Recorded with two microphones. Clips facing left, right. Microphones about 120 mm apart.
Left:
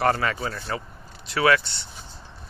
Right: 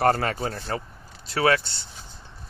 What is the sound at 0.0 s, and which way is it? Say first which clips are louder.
Speech: right 1 dB; 45° right (ahead or behind).